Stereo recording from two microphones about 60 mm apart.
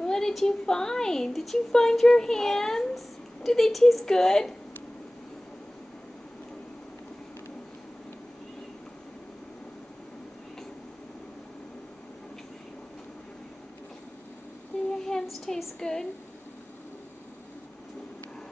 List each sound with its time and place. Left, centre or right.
0.0 s a woman's voice: centre
14.7 s child singing: centre
15.2 s a woman's voice: centre